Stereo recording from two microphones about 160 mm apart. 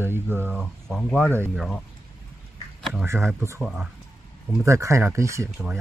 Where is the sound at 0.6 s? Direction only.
5° left (ahead or behind).